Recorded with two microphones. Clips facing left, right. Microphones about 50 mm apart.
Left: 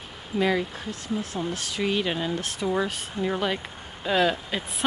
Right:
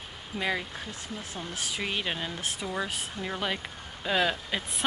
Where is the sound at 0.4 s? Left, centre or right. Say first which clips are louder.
Left 7 dB; centre.